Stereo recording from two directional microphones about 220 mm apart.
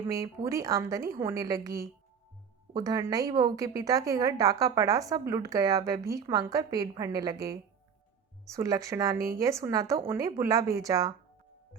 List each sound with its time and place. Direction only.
0.1 s a woman's voice: 15° right (ahead or behind)